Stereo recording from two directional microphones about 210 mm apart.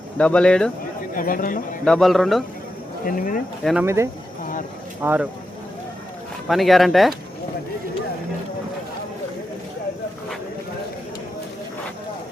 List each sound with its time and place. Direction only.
0.2 s speech: 5° left (ahead or behind)
1.1 s speech: 40° left (ahead or behind)
1.8 s speech: centre (ahead or behind)
3.1 s speech: 40° left (ahead or behind)
3.6 s speech: centre (ahead or behind)
3.8 s speech: 15° right (ahead or behind)
6.5 s speech: centre (ahead or behind)